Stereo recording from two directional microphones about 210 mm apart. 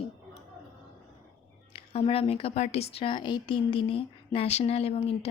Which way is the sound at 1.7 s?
25° left (ahead or behind).